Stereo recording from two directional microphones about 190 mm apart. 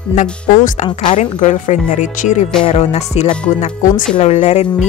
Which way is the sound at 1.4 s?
40° left (ahead or behind).